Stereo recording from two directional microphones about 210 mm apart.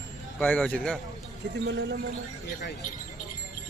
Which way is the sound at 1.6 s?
55° right (ahead or behind).